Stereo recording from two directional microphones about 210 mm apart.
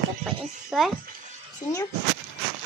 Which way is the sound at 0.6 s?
Centre (ahead or behind).